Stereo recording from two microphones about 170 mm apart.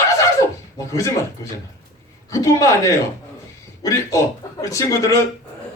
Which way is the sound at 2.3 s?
20° left (ahead or behind).